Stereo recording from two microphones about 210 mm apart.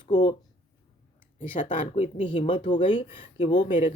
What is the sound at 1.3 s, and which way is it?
Speech, 40° left (ahead or behind).